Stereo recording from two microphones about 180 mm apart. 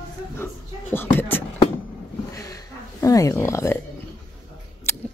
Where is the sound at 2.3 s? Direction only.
20° left (ahead or behind).